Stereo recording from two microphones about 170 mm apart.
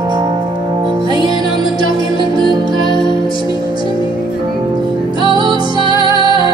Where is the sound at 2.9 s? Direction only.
30° left (ahead or behind).